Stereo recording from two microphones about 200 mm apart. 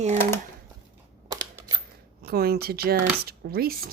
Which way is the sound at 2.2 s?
50° right (ahead or behind).